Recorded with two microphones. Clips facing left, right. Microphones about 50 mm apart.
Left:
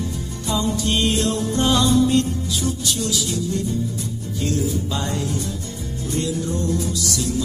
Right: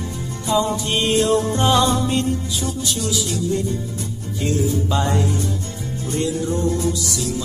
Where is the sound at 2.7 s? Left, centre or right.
Right.